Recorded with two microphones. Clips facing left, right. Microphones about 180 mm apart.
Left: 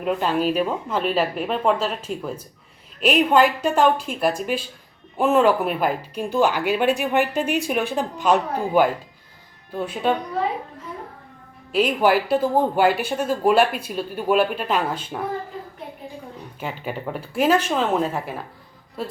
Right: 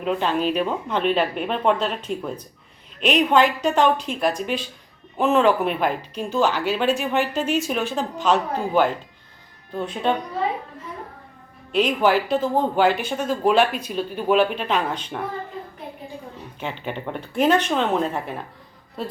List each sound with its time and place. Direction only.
0.0 s speech: 5° left (ahead or behind)
11.7 s speech: 10° left (ahead or behind)
16.6 s speech: 5° left (ahead or behind)